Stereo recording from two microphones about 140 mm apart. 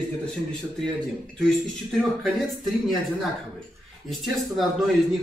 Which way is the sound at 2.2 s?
Centre (ahead or behind).